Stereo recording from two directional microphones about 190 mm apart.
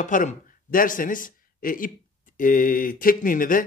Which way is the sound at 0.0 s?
45° left (ahead or behind).